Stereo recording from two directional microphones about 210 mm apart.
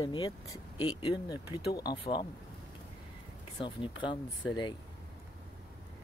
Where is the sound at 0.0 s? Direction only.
15° left (ahead or behind).